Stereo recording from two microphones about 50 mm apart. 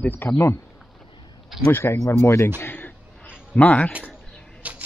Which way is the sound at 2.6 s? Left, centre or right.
Left.